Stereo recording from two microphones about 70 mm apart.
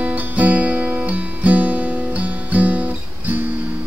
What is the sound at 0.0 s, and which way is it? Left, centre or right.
Music, right.